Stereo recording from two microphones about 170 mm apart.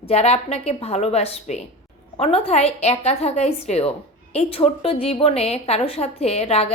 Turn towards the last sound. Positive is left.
turn(degrees=35)  # may be behind; listen again after turning